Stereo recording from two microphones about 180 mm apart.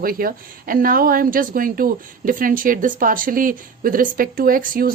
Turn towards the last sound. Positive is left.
turn(degrees=-50)  # may be behind; listen again after turning